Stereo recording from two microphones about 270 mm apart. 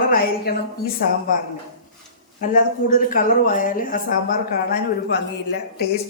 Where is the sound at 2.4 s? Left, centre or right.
Left.